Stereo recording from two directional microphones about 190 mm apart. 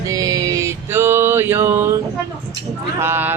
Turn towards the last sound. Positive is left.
turn(degrees=-10)  # may be behind; listen again after turning